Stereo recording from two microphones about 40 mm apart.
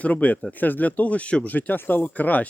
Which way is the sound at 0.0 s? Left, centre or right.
Left.